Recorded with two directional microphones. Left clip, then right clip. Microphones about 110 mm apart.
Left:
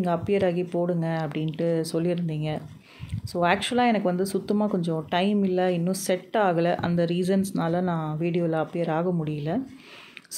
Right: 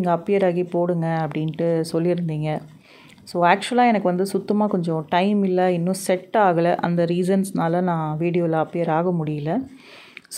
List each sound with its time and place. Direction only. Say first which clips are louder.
0.0 s speech: right 5 dB; 35° right (ahead or behind)